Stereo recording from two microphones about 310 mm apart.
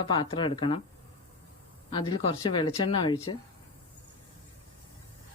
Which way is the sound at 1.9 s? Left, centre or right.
Centre.